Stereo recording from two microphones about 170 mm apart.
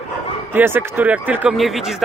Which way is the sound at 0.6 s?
10° right (ahead or behind).